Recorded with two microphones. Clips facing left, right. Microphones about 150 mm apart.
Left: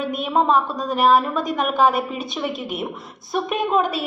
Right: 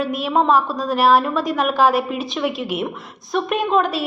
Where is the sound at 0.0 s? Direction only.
Centre (ahead or behind).